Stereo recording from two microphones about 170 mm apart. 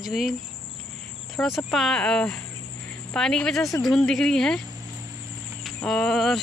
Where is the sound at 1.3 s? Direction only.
Centre (ahead or behind).